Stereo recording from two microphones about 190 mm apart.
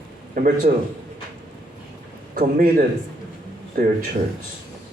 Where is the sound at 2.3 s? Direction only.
45° right (ahead or behind).